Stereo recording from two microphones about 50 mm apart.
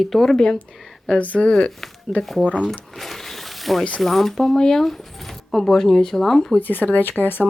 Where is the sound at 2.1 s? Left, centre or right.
Centre.